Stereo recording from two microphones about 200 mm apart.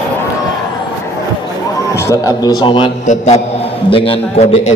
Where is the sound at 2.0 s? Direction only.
15° left (ahead or behind).